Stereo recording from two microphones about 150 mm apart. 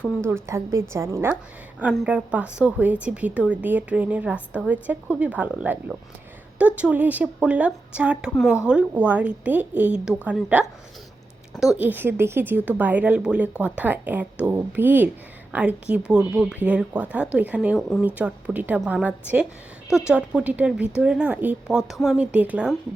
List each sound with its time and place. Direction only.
0.2 s a woman's voice: 15° right (ahead or behind)
11.8 s a woman's voice: 10° right (ahead or behind)
17.7 s speech: centre (ahead or behind)
18.0 s a woman's voice: 10° right (ahead or behind)